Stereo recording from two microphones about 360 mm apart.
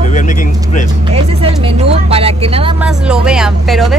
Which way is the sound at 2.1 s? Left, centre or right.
Centre.